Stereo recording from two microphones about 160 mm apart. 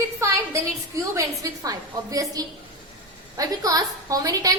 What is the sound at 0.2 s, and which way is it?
A woman's voice, 20° right (ahead or behind).